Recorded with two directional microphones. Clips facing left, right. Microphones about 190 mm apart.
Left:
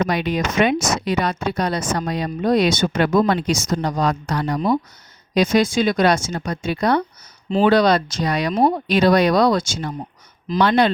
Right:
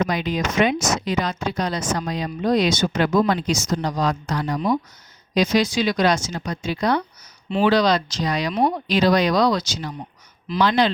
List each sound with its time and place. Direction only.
0.1 s speech: 65° left (ahead or behind)
4.5 s speech: 30° left (ahead or behind)
5.3 s speech: 50° left (ahead or behind)